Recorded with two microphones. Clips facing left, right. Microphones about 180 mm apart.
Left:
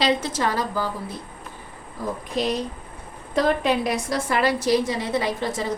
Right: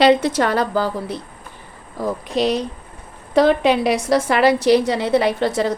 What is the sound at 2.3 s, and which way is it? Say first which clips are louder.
A woman's voice: right 5 dB; 75° right (ahead or behind).